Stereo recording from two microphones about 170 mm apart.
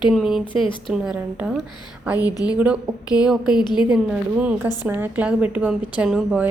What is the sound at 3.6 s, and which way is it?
Speech, 25° left (ahead or behind).